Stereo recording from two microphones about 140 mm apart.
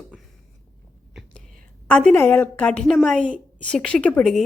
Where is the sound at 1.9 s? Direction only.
10° left (ahead or behind).